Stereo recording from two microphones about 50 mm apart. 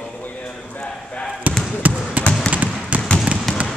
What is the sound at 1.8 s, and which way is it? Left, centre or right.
Trickle, right.